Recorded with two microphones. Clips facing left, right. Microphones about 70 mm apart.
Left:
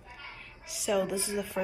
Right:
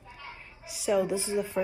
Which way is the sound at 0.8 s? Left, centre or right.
Right.